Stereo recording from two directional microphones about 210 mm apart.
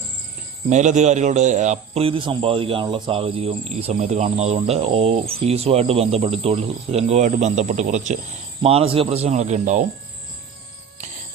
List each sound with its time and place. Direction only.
0.7 s a man's voice: 35° right (ahead or behind)